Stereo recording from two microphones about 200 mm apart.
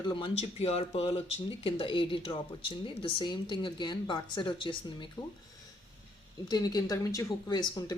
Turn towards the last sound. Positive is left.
turn(degrees=20)  # may be behind; listen again after turning